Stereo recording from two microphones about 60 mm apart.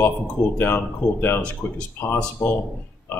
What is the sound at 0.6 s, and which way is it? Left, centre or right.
Speech, left.